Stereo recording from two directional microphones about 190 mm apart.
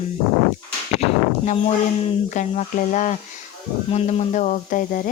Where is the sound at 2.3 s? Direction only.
40° left (ahead or behind).